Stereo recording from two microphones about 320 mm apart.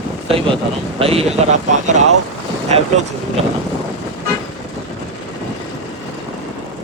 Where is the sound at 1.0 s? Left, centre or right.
Centre.